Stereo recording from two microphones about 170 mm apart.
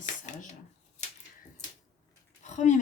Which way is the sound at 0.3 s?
45° left (ahead or behind).